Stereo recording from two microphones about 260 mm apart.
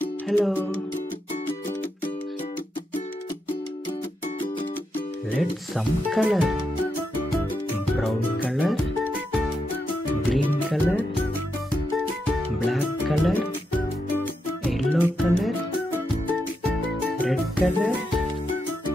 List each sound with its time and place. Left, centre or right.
0.0 s music: centre
4.9 s speech: centre
7.7 s music: centre
10.3 s music: centre
12.7 s music: centre
17.2 s music: centre